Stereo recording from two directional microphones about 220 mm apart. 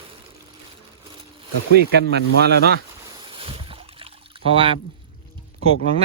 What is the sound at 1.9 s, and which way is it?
Speech, 50° right (ahead or behind).